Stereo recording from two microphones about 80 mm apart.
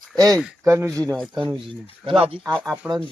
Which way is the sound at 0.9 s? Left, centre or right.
Centre.